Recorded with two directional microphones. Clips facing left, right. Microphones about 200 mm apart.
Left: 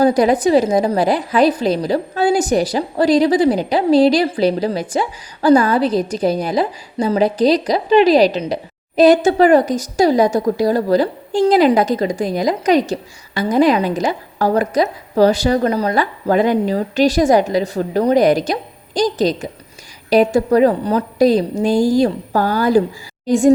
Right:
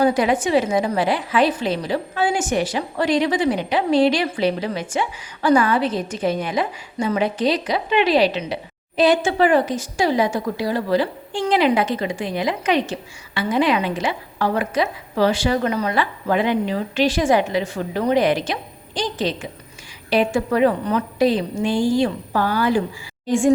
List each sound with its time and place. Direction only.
0.0 s a woman's voice: 40° left (ahead or behind)